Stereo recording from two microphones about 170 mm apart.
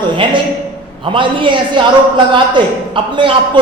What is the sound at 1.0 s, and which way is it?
A man's voice, 30° right (ahead or behind).